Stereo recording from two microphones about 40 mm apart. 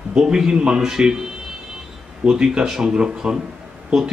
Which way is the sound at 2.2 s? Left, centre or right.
Centre.